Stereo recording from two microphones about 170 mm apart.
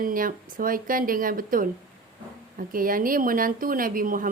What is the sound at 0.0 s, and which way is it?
A woman's voice, 55° right (ahead or behind).